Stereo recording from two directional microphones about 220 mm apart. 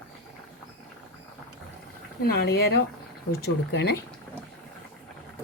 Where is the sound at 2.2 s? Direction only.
45° left (ahead or behind).